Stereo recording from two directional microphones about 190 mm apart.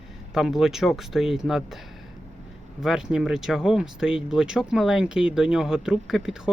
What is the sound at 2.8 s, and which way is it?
Speech, centre (ahead or behind).